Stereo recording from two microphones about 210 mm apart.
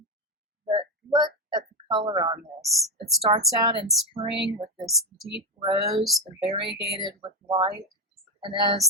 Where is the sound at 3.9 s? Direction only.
Centre (ahead or behind).